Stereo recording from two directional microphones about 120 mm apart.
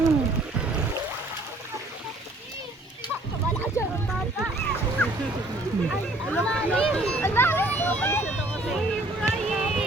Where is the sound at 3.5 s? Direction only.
15° left (ahead or behind).